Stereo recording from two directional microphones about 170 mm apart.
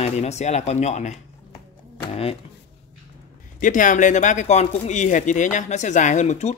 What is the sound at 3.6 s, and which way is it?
Speech, 50° left (ahead or behind).